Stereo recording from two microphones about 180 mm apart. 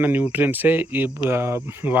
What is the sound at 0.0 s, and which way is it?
Speech, 10° right (ahead or behind).